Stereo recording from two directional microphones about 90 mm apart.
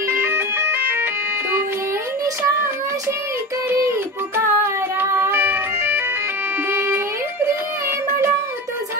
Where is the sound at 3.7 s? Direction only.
30° right (ahead or behind).